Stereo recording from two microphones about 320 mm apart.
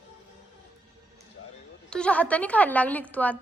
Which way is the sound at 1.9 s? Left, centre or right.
Centre.